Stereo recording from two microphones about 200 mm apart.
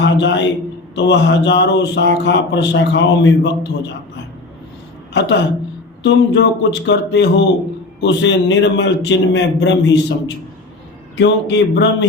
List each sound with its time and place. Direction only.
0.0 s a man's voice: 60° left (ahead or behind)
5.1 s speech: 60° left (ahead or behind)